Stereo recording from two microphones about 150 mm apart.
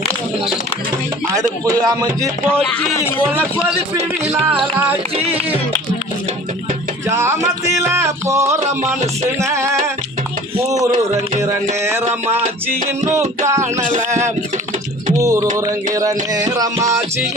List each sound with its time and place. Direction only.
1.4 s speech: 25° right (ahead or behind)
3.9 s music: 45° right (ahead or behind)
7.2 s music: 20° right (ahead or behind)
9.4 s speech: 20° right (ahead or behind)
13.1 s speech: 20° right (ahead or behind)
15.1 s music: 20° right (ahead or behind)
15.5 s speech: 25° right (ahead or behind)